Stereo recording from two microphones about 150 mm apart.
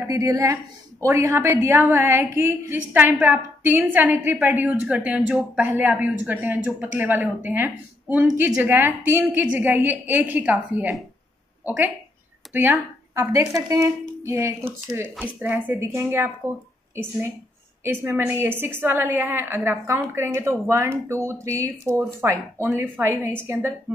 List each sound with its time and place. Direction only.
0.0 s a woman's voice: 20° right (ahead or behind)
17.8 s a woman's voice: 15° right (ahead or behind)